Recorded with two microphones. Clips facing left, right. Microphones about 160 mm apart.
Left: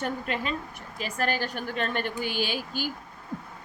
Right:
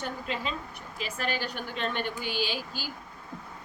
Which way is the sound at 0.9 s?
45° left (ahead or behind).